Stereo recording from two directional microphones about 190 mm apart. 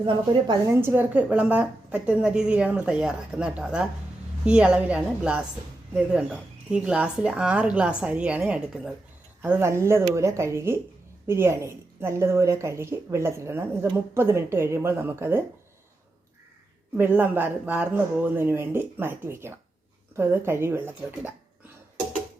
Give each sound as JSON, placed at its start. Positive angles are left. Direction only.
{"t": 0.0, "sound": "a woman's voice", "side_deg": -25}
{"t": 0.7, "sound": "a woman's voice", "side_deg": -10}
{"t": 16.9, "sound": "a woman's voice", "side_deg": -10}